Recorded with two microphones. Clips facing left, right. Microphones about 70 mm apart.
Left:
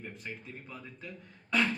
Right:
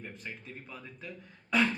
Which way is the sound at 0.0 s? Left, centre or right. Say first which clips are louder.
Left 1 dB; centre.